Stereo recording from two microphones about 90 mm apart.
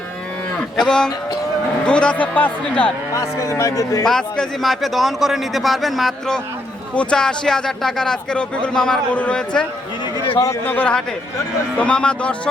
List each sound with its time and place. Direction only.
0.8 s speech: 5° left (ahead or behind)
3.2 s a man's voice: 35° left (ahead or behind)
4.0 s a man's voice: 5° left (ahead or behind)
10.3 s a man's voice: 40° left (ahead or behind)
10.7 s speech: 15° left (ahead or behind)